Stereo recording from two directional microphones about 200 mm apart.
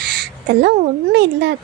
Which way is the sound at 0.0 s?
50° right (ahead or behind).